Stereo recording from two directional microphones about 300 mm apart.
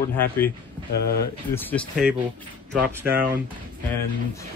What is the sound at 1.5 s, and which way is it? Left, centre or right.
Speech, centre.